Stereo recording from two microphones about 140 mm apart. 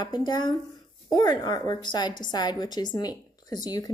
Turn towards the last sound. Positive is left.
turn(degrees=30)  # may be behind; listen again after turning